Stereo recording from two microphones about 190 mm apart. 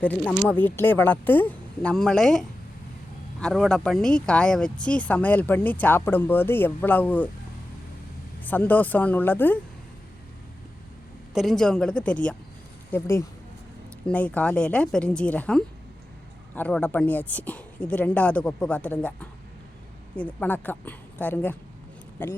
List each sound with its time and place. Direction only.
0.0 s speech: 5° left (ahead or behind)
3.4 s speech: centre (ahead or behind)
8.4 s speech: 10° left (ahead or behind)
11.3 s speech: centre (ahead or behind)